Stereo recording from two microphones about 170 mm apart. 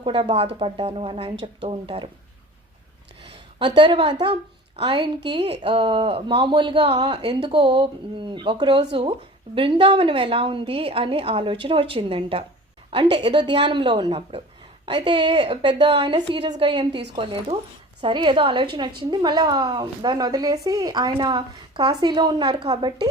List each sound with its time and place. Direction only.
0.0 s a woman's voice: 30° right (ahead or behind)
3.6 s a woman's voice: 25° right (ahead or behind)